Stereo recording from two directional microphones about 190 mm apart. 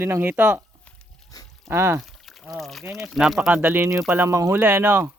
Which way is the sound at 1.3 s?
20° left (ahead or behind).